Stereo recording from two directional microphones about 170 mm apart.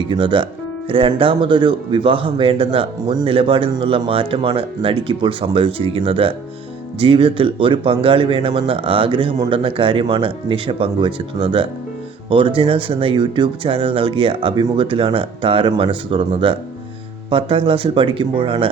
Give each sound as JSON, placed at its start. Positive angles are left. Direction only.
{"t": 0.1, "sound": "speech", "side_deg": -30}